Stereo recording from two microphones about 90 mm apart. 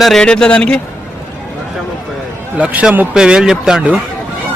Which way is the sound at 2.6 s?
15° right (ahead or behind).